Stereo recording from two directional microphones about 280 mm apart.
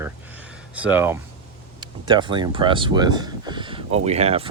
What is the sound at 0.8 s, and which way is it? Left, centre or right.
Speech, centre.